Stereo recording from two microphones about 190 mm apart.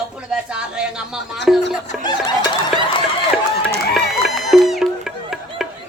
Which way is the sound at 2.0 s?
20° left (ahead or behind).